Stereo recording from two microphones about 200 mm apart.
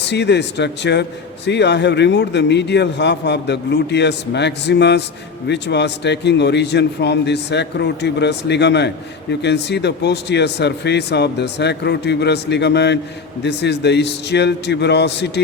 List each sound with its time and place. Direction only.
0.1 s a man's voice: 60° left (ahead or behind)